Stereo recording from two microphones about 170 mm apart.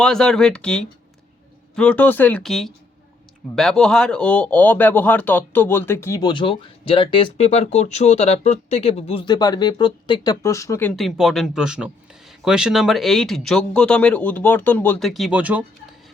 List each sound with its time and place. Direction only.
0.0 s speech: 5° left (ahead or behind)
10.9 s speech: centre (ahead or behind)